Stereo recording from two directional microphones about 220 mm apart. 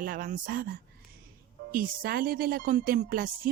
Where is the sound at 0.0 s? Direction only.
40° right (ahead or behind).